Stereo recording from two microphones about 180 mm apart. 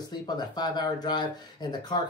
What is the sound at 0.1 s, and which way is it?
Speech, 25° left (ahead or behind).